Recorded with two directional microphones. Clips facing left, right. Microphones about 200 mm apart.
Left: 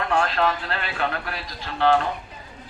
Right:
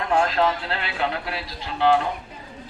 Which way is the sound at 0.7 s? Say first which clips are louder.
Right 1 dB; 20° right (ahead or behind).